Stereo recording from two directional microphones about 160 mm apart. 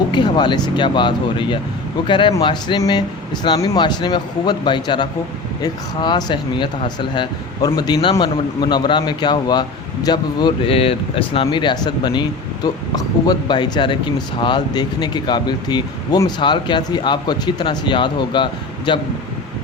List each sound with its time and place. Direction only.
0.1 s speech: 30° left (ahead or behind)